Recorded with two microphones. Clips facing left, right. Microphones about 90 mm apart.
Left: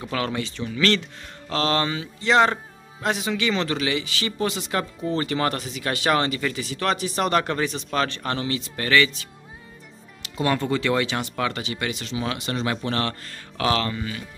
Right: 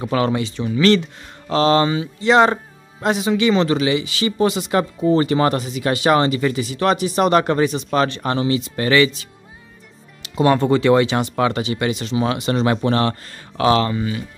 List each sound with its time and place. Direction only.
0.1 s speech: 20° right (ahead or behind)
10.3 s speech: 30° right (ahead or behind)
12.5 s speech: 35° right (ahead or behind)
13.6 s speech: 20° right (ahead or behind)